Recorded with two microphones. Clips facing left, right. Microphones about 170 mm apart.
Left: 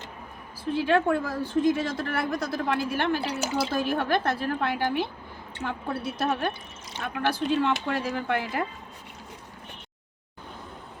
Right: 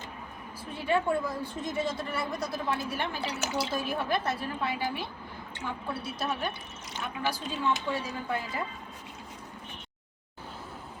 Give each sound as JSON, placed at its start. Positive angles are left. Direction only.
{"t": 0.7, "sound": "a woman's voice", "side_deg": 85}
{"t": 3.4, "sound": "speech", "side_deg": 30}
{"t": 3.8, "sound": "speech", "side_deg": 70}
{"t": 5.6, "sound": "a woman's voice", "side_deg": 55}
{"t": 7.0, "sound": "speech", "side_deg": 65}